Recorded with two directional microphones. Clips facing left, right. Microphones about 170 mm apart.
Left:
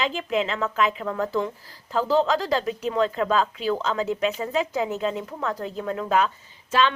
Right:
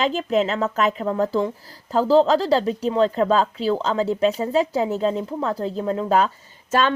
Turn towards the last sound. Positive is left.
turn(degrees=-45)  # may be behind; listen again after turning